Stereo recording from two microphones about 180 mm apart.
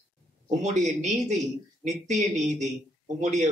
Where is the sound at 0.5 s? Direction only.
40° right (ahead or behind).